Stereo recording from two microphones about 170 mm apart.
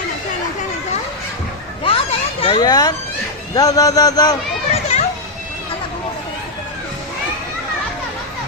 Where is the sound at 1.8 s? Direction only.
35° left (ahead or behind).